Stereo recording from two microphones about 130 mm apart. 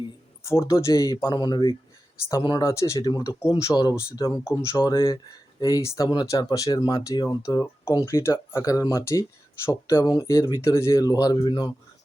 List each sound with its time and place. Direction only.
0.4 s speech: 20° left (ahead or behind)
3.7 s speech: 5° left (ahead or behind)
4.1 s speech: 30° left (ahead or behind)
4.9 s speech: 40° left (ahead or behind)